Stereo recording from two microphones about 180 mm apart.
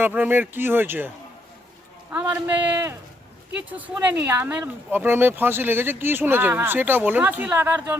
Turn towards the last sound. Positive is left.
turn(degrees=-10)  # may be behind; listen again after turning